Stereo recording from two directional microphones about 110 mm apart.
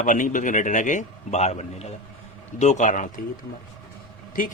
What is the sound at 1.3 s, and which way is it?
A man's voice, 90° left.